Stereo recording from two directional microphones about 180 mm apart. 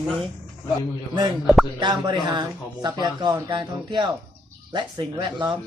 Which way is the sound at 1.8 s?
25° right (ahead or behind).